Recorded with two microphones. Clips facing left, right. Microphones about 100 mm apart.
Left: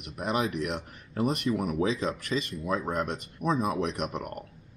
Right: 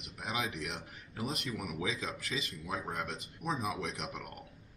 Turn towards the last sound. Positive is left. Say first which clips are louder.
# left 9 dB
turn(degrees=50)  # may be behind; listen again after turning